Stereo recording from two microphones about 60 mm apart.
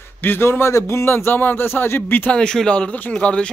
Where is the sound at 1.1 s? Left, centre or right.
Left.